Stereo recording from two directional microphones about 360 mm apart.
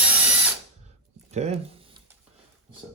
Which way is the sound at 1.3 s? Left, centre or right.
Centre.